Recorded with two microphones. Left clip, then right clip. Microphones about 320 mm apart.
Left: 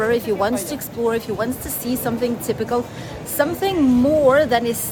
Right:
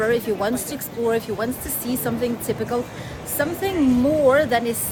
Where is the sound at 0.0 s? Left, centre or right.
Centre.